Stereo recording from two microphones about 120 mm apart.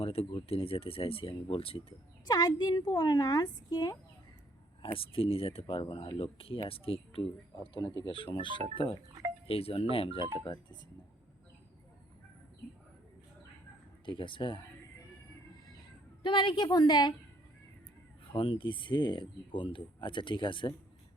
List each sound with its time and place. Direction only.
0.0 s speech: 50° left (ahead or behind)
2.2 s speech: 35° left (ahead or behind)
4.8 s speech: 50° left (ahead or behind)
7.7 s speech: 40° left (ahead or behind)
8.1 s speech: 45° left (ahead or behind)
14.0 s speech: 45° left (ahead or behind)
16.2 s speech: 40° left (ahead or behind)
18.3 s speech: 50° left (ahead or behind)